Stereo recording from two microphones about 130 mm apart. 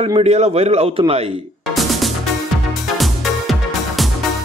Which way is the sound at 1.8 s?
Centre (ahead or behind).